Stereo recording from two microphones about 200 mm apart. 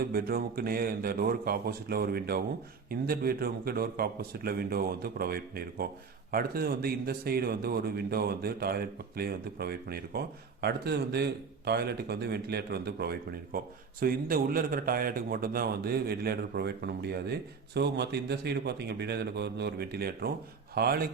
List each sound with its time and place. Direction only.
0.0 s a man's voice: 50° right (ahead or behind)